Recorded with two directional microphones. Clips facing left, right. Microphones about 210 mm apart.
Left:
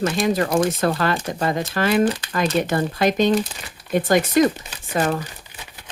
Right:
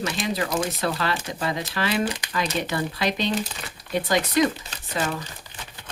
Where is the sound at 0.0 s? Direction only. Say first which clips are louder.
Left 7 dB; 45° left (ahead or behind).